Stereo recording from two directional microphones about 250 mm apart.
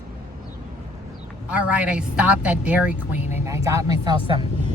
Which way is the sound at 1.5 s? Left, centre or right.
Centre.